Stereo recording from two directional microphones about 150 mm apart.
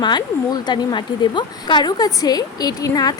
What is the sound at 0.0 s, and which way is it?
A woman's voice, 25° left (ahead or behind).